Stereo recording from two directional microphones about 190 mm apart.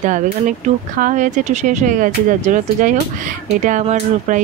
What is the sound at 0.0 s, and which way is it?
Speech, 40° right (ahead or behind).